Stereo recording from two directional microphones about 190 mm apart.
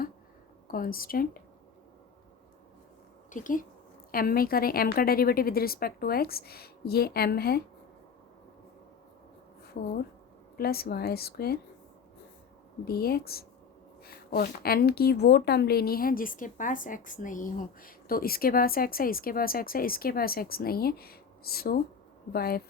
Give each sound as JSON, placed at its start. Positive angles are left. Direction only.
{"t": 0.7, "sound": "a woman's voice", "side_deg": 50}
{"t": 3.3, "sound": "a woman's voice", "side_deg": 45}
{"t": 9.7, "sound": "a woman's voice", "side_deg": 50}
{"t": 12.8, "sound": "a woman's voice", "side_deg": 55}